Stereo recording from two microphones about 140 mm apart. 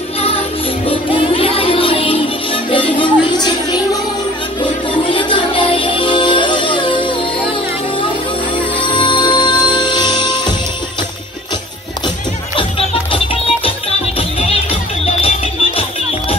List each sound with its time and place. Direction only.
0.8 s music: 40° left (ahead or behind)
5.1 s music: 35° left (ahead or behind)
8.8 s music: 35° left (ahead or behind)
12.5 s music: 40° left (ahead or behind)
15.0 s music: 45° left (ahead or behind)